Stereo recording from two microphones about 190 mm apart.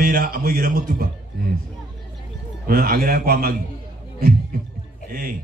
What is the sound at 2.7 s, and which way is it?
Speech, 50° right (ahead or behind).